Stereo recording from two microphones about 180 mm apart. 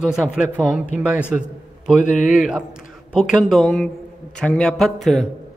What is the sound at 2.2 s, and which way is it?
A man's voice, 5° right (ahead or behind).